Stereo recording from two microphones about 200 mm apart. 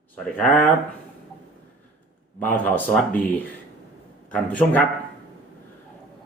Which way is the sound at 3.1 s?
10° left (ahead or behind).